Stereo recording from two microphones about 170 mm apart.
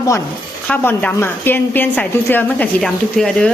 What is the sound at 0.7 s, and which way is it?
A woman's voice, 10° left (ahead or behind).